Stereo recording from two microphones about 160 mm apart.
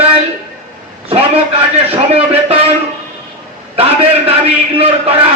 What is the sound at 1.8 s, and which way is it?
Speech, 35° right (ahead or behind).